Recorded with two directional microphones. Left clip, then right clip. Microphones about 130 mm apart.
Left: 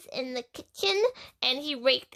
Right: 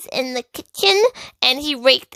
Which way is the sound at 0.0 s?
65° right (ahead or behind).